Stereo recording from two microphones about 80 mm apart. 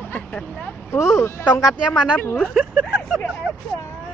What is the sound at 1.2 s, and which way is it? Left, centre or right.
Speech, left.